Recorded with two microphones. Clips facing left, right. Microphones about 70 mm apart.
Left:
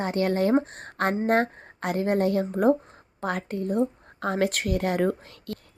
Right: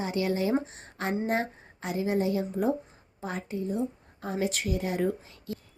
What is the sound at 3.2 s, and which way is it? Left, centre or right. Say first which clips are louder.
A woman's voice: left 5 dB; left.